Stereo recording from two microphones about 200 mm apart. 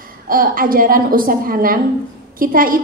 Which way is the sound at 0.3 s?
45° right (ahead or behind).